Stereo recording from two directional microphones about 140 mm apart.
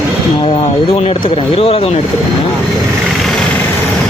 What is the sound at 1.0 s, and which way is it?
Speech, 45° left (ahead or behind).